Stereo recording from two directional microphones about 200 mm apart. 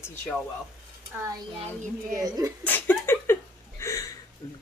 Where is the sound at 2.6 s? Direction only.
10° left (ahead or behind).